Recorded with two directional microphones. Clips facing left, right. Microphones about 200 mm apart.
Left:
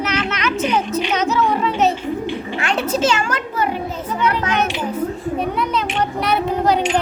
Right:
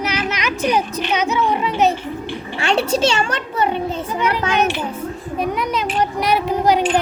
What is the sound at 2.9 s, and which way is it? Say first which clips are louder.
A child's voice: right 1 dB; 30° right (ahead or behind).